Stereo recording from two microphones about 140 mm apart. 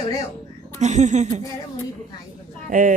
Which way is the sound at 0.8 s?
55° right (ahead or behind).